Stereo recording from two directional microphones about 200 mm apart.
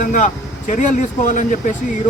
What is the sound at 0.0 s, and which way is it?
Speech, 40° left (ahead or behind).